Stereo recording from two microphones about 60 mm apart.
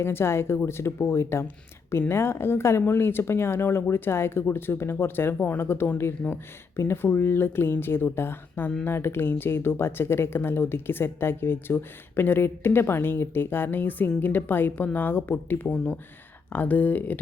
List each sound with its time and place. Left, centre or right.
0.0 s speech: left
15.7 s speech: left